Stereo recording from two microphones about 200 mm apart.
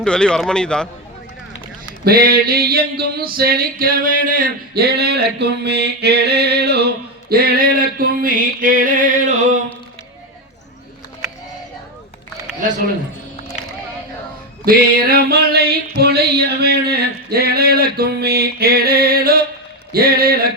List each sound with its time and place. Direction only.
0.0 s speech: 5° left (ahead or behind)
2.0 s male singing: 45° right (ahead or behind)
14.6 s male singing: 50° right (ahead or behind)